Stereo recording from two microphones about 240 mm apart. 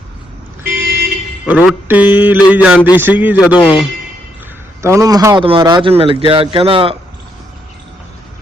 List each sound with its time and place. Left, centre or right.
0.7 s car alarm: right
1.5 s mantra: centre
2.5 s a man's voice: centre; by 6.9 s right